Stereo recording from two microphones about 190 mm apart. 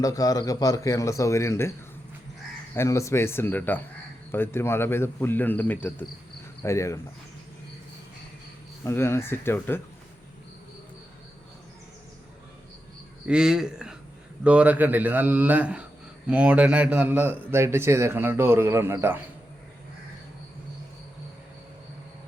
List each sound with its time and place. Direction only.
0.0 s a man's voice: 20° left (ahead or behind)
2.7 s a man's voice: 15° left (ahead or behind)
8.8 s a man's voice: 15° left (ahead or behind)
13.2 s a man's voice: 5° right (ahead or behind)